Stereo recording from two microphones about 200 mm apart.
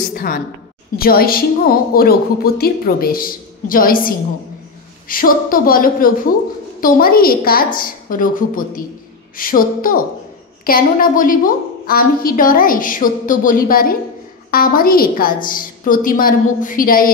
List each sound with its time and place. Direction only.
0.0 s a woman's voice: 45° left (ahead or behind)